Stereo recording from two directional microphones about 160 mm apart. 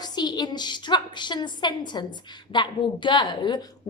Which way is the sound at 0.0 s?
25° left (ahead or behind).